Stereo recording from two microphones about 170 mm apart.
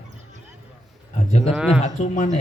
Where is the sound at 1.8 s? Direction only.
45° left (ahead or behind).